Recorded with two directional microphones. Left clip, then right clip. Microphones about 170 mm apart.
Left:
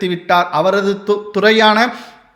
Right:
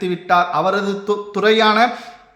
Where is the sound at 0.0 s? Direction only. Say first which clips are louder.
Left 2 dB; 20° left (ahead or behind).